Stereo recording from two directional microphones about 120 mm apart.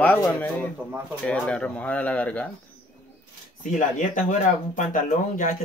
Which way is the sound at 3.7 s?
90° left.